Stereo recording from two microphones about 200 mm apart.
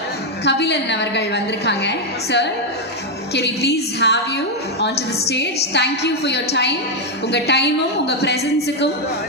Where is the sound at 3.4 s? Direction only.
55° left (ahead or behind).